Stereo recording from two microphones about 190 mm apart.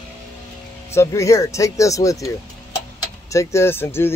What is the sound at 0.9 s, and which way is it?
Speech, 15° left (ahead or behind).